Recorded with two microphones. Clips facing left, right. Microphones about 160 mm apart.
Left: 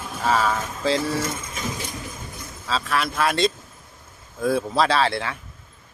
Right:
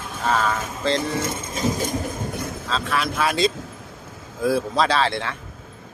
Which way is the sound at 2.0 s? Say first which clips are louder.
Right 9 dB; 65° right (ahead or behind).